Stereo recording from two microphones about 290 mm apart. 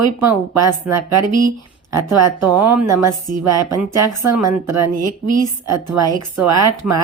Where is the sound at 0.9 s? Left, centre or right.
Right.